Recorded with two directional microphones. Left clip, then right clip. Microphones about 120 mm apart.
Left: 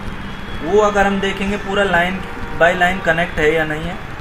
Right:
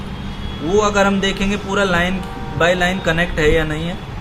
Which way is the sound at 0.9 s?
15° right (ahead or behind).